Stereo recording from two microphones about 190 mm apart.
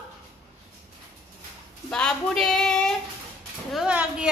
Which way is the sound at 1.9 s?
5° left (ahead or behind).